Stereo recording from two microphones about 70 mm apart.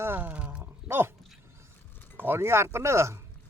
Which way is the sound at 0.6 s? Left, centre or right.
Right.